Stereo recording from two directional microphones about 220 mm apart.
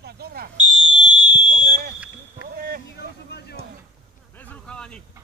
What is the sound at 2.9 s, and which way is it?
Vehicle, 50° left (ahead or behind).